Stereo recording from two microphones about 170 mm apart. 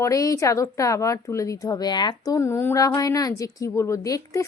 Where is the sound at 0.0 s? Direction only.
20° left (ahead or behind).